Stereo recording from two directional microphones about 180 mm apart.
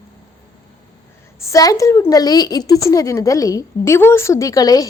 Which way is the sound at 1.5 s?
20° left (ahead or behind).